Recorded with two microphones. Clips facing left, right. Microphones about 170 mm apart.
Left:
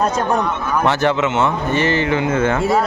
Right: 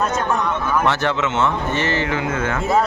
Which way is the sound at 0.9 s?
15° left (ahead or behind).